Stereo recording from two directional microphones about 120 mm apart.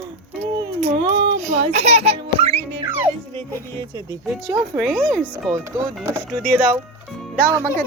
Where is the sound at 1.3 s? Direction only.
70° right (ahead or behind).